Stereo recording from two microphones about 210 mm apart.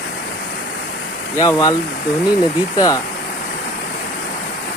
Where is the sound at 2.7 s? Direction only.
20° left (ahead or behind).